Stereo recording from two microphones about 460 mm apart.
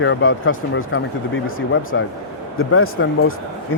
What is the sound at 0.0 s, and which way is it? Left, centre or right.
Speech, left.